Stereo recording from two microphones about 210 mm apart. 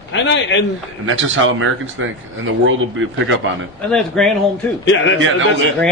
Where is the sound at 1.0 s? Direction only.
70° right (ahead or behind).